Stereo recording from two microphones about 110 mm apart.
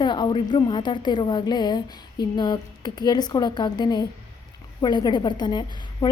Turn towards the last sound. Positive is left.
turn(degrees=40)  # may be behind; listen again after turning